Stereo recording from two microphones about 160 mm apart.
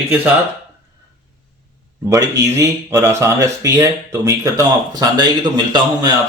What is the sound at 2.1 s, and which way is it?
Speech, 20° right (ahead or behind).